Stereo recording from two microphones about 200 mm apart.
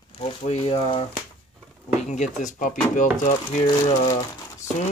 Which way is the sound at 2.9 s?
40° left (ahead or behind).